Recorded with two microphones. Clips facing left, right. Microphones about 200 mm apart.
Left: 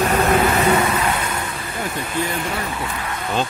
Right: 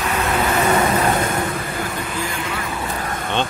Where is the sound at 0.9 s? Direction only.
50° right (ahead or behind).